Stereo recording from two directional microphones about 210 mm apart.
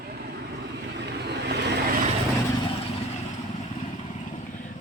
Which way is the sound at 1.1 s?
50° right (ahead or behind).